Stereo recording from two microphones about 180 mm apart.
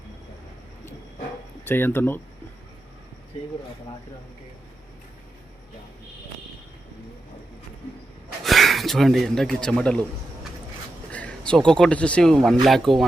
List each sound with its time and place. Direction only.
1.6 s speech: 10° left (ahead or behind)
8.4 s speech: centre (ahead or behind)
11.1 s speech: 5° left (ahead or behind)